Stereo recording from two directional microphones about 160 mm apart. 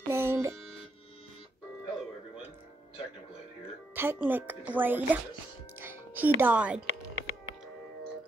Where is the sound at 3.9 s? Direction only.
15° right (ahead or behind).